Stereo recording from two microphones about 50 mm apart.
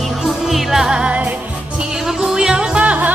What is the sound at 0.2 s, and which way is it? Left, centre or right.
Music, centre.